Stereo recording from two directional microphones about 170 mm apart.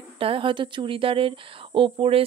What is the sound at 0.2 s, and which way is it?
A woman's voice, 30° right (ahead or behind).